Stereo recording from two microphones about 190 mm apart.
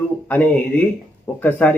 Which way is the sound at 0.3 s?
10° left (ahead or behind).